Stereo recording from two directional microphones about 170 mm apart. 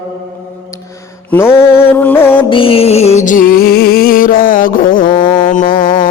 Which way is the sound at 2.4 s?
30° left (ahead or behind).